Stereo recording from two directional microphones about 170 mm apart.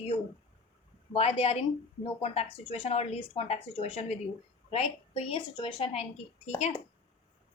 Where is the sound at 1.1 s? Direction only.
35° left (ahead or behind).